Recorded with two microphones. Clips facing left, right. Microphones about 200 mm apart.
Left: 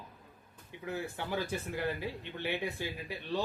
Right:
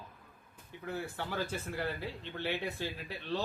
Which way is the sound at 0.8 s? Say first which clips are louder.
Left 1 dB; 15° left (ahead or behind).